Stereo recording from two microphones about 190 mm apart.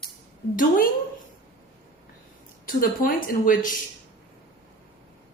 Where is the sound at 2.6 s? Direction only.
45° left (ahead or behind).